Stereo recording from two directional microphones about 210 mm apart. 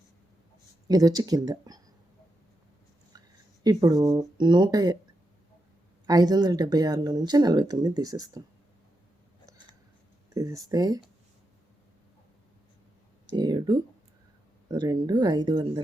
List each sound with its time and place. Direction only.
0.9 s speech: 20° right (ahead or behind)
3.6 s speech: 15° right (ahead or behind)
6.1 s speech: 20° right (ahead or behind)
10.3 s a sound: 15° right (ahead or behind)
10.7 s speech: 20° right (ahead or behind)
13.3 s speech: 20° right (ahead or behind)